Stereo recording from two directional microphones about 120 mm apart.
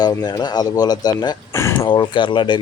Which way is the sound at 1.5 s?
20° left (ahead or behind).